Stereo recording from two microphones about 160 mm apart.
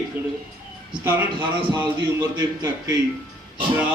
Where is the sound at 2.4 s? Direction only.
20° right (ahead or behind).